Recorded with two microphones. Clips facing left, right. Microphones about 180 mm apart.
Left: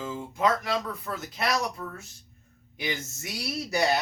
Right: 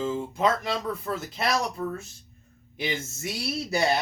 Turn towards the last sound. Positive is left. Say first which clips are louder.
# right 2 dB
turn(degrees=-30)  # may be behind; listen again after turning